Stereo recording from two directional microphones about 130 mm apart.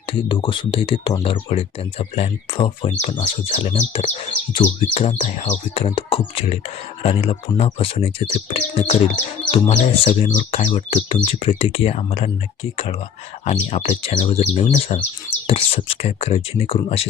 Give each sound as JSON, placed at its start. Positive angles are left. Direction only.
{"t": 0.1, "sound": "speech", "side_deg": 40}
{"t": 9.5, "sound": "speech", "side_deg": 45}
{"t": 13.4, "sound": "speech", "side_deg": 60}